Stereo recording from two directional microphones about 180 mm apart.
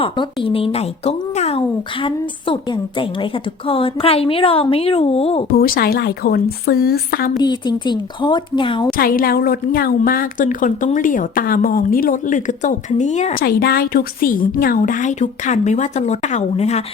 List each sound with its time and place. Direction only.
0.0 s speech: 30° left (ahead or behind)
5.5 s a woman's voice: 55° left (ahead or behind)
7.3 s a woman's voice: 25° left (ahead or behind)
8.9 s a woman's voice: 55° left (ahead or behind)
13.4 s a woman's voice: 60° left (ahead or behind); by 16.8 s 35° left (ahead or behind)